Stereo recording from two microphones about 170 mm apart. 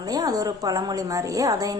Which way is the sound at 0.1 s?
20° right (ahead or behind).